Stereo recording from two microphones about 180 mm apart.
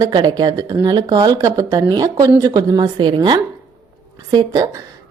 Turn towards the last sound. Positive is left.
turn(degrees=-20)  # may be behind; listen again after turning